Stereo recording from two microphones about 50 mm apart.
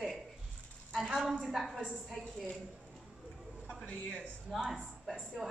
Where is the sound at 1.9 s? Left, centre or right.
Centre.